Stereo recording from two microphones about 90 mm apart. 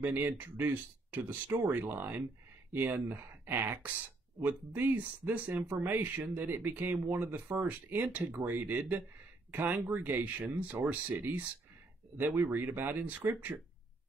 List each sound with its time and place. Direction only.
0.0 s speech: 20° right (ahead or behind)